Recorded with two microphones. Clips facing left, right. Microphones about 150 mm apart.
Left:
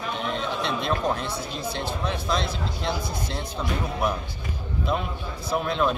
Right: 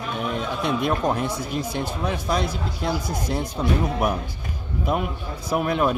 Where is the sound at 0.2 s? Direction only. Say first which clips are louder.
Right 3 dB; 10° right (ahead or behind).